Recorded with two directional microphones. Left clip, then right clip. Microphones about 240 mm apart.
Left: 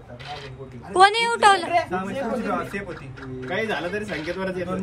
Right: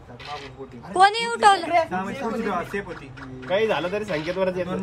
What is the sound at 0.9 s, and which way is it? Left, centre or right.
Speech, centre.